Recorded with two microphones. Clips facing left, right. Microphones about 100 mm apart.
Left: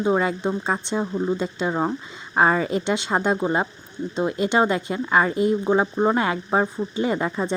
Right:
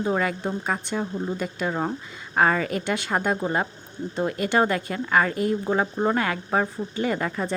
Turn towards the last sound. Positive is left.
turn(degrees=20)  # may be behind; listen again after turning